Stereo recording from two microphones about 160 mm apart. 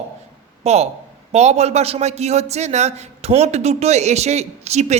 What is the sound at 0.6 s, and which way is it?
A man's voice, 40° right (ahead or behind).